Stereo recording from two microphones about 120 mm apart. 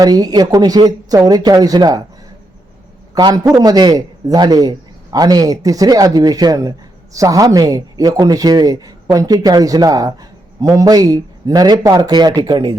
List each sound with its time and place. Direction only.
0.0 s speech: 35° right (ahead or behind)
3.2 s speech: 30° right (ahead or behind)